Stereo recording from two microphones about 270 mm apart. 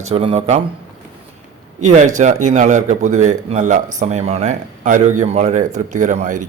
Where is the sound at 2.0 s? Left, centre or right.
Right.